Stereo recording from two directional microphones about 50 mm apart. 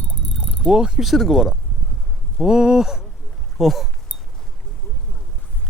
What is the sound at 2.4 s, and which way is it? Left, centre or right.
Speech, centre.